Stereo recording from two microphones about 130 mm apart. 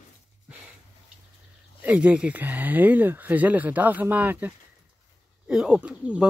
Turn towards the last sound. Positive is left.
turn(degrees=-10)  # may be behind; listen again after turning